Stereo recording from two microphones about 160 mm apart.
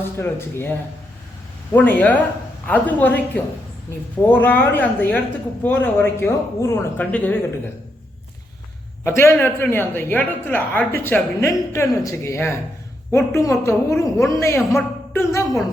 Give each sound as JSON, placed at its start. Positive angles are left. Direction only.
{"t": 0.2, "sound": "a woman's voice", "side_deg": 15}
{"t": 1.7, "sound": "a woman's voice", "side_deg": 10}
{"t": 9.0, "sound": "a woman's voice", "side_deg": 15}